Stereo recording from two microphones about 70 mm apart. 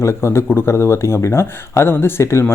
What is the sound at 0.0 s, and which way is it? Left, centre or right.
Speech, left.